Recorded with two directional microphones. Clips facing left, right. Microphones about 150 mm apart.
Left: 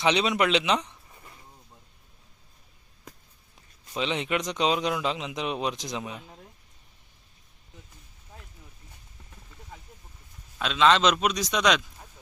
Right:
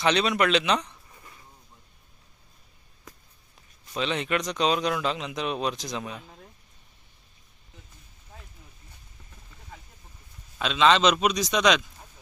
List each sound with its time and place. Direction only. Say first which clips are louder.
0.0 s speech: even; 15° left (ahead or behind)
3.9 s speech: right 1 dB; 20° left (ahead or behind)
10.6 s a man's voice: right 1 dB; centre (ahead or behind)